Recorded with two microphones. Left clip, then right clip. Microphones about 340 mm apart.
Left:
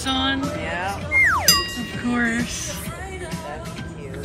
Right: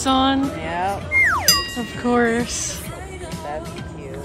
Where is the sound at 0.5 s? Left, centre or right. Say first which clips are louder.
Right 3 dB; right.